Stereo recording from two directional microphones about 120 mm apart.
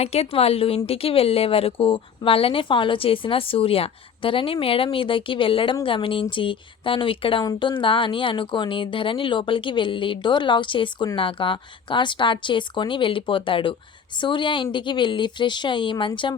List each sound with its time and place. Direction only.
0.0 s a woman's voice: 60° left (ahead or behind); by 16.4 s 40° left (ahead or behind)